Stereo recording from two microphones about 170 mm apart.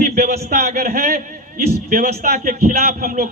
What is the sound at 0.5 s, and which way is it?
A man's voice, 65° right (ahead or behind).